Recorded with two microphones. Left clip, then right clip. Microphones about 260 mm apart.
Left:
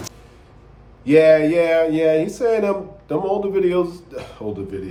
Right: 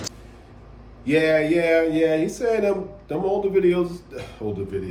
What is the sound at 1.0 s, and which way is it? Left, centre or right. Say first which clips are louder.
Speech: left 7 dB; centre.